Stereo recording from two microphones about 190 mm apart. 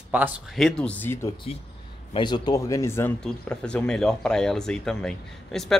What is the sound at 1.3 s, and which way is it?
Speech, 30° left (ahead or behind).